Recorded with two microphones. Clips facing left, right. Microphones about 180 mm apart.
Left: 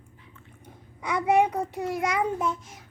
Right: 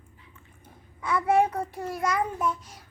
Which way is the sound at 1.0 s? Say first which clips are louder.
Left 1 dB; 15° left (ahead or behind).